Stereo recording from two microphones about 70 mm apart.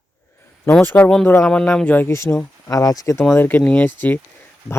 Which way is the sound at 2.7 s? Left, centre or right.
Left.